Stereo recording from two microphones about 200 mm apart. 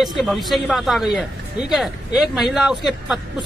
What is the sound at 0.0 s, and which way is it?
Speech, centre (ahead or behind).